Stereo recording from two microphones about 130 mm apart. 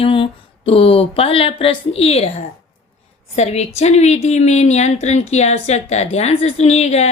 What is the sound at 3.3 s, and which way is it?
A woman's voice, 55° left (ahead or behind).